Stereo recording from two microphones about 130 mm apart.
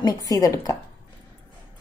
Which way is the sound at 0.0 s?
30° left (ahead or behind).